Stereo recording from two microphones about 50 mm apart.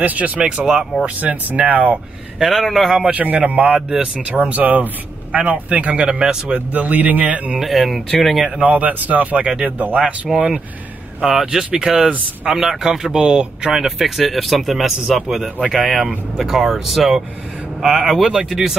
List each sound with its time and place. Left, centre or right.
0.0 s speech: right
2.3 s speech: centre
3.1 s speech: right
5.9 s a man's voice: centre
6.5 s speech: right
7.6 s speech: centre
8.4 s a man's voice: centre
8.6 s speech: right
9.8 s speech: right
10.0 s a man's voice: centre
13.7 s a man's voice: centre